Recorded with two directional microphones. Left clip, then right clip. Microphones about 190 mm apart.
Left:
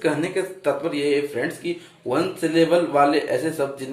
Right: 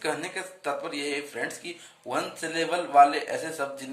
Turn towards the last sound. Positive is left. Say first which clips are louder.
# left 7 dB
turn(degrees=-30)  # may be behind; listen again after turning